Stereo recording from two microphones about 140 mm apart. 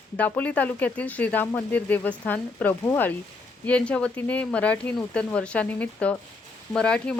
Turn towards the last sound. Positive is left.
turn(degrees=5)  # may be behind; listen again after turning